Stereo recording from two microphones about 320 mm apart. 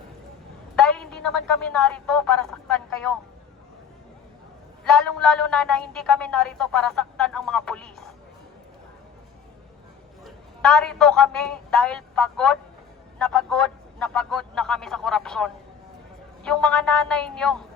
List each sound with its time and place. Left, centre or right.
0.8 s a woman's voice: centre
4.8 s a woman's voice: centre
10.2 s a man's voice: centre